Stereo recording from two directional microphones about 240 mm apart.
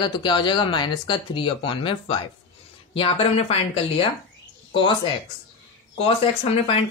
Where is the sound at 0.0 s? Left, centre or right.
Centre.